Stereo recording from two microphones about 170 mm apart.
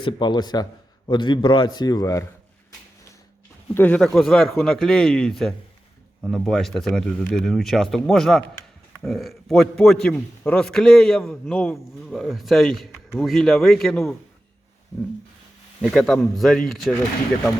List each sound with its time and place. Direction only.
0.0 s a man's voice: 25° left (ahead or behind)
3.8 s a man's voice: 10° left (ahead or behind)
15.8 s a man's voice: centre (ahead or behind)